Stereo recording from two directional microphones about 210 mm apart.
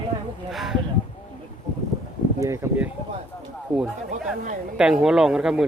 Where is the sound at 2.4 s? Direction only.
15° right (ahead or behind).